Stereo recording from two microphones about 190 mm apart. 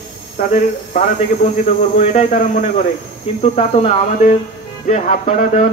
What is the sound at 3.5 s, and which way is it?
Speech, 35° left (ahead or behind).